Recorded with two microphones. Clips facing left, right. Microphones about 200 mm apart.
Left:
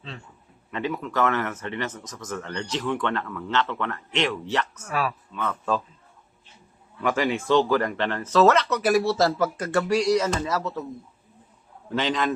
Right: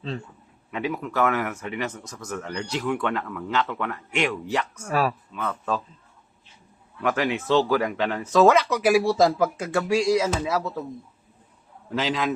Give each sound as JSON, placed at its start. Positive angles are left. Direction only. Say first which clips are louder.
{"t": 0.7, "sound": "speech", "louder": "even", "side_deg": -5}
{"t": 4.9, "sound": "speech", "louder": "right 5 dB", "side_deg": -40}
{"t": 5.3, "sound": "speech", "louder": "left 1 dB", "side_deg": -5}
{"t": 7.0, "sound": "speech", "louder": "even", "side_deg": 0}
{"t": 11.9, "sound": "speech", "louder": "even", "side_deg": -5}